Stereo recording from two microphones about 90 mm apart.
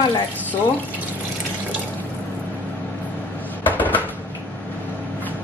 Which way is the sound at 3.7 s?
20° left (ahead or behind).